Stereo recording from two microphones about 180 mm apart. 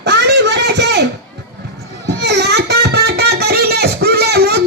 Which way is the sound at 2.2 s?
70° right (ahead or behind).